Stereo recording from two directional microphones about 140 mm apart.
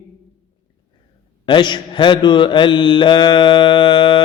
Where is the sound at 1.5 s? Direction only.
35° left (ahead or behind).